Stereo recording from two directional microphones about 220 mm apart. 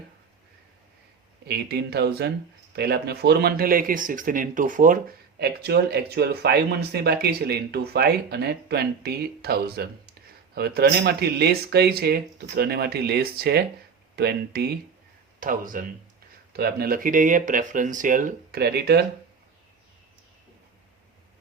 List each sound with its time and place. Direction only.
1.5 s speech: 45° right (ahead or behind)